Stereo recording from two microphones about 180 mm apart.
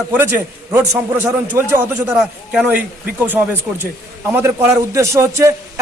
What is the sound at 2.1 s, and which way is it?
A man's voice, 5° right (ahead or behind).